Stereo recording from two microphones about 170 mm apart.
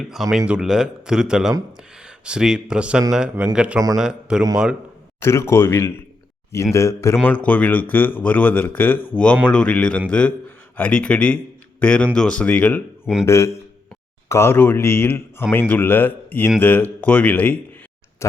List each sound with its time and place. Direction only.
0.1 s speech: centre (ahead or behind)
5.2 s a man's voice: 15° left (ahead or behind)